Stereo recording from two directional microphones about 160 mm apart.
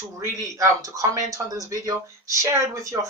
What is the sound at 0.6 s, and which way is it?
Speech, 20° right (ahead or behind).